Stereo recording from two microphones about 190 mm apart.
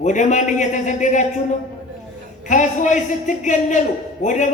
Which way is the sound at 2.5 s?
40° left (ahead or behind).